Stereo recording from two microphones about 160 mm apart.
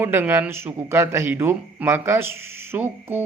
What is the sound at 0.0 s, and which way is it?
A man's voice, 10° right (ahead or behind).